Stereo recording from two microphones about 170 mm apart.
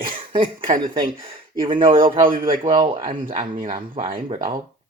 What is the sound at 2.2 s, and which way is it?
Speech, 55° right (ahead or behind).